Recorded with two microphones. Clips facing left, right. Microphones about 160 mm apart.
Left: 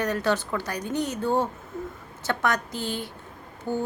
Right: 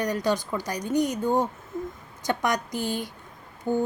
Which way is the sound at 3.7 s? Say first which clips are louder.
Right 3 dB; 20° right (ahead or behind).